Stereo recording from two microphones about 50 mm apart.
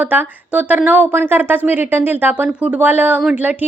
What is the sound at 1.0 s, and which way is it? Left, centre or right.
A woman's voice, right.